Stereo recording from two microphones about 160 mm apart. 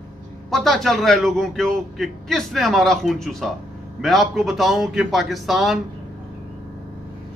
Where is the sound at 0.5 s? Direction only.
Centre (ahead or behind).